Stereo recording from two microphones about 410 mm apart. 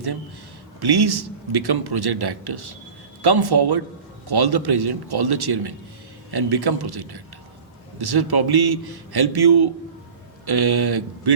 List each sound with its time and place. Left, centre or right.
0.8 s a man's voice: right